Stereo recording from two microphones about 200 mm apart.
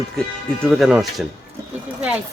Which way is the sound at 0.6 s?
Centre (ahead or behind).